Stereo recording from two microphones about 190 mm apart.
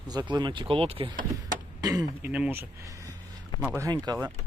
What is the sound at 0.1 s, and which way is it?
Speech, 20° right (ahead or behind).